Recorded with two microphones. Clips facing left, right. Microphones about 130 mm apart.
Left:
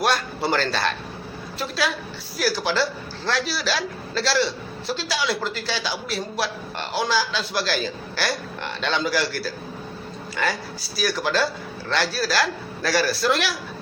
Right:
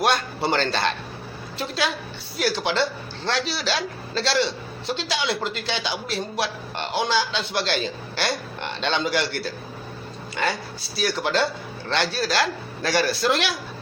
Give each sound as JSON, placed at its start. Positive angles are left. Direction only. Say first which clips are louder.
{"t": 0.0, "sound": "a man's voice", "louder": "right 1 dB", "side_deg": -25}